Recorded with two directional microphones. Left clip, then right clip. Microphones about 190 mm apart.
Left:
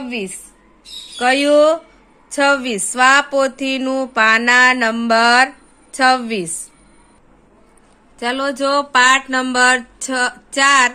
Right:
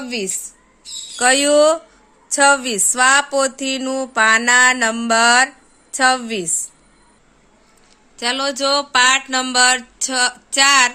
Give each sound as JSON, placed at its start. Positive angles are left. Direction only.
{"t": 0.0, "sound": "speech", "side_deg": -35}
{"t": 1.1, "sound": "speech", "side_deg": -20}
{"t": 8.2, "sound": "speech", "side_deg": -10}